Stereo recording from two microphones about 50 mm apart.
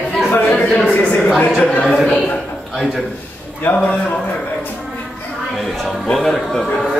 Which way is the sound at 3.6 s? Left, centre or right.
Left.